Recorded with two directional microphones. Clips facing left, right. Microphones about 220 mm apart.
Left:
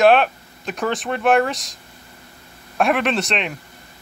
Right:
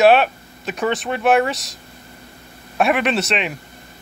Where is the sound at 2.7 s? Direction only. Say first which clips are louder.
Right 1 dB; 5° right (ahead or behind).